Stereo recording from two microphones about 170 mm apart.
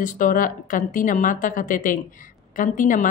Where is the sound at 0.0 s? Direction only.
50° left (ahead or behind).